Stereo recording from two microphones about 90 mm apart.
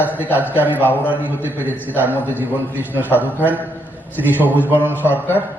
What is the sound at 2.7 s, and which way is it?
Speech, 20° right (ahead or behind).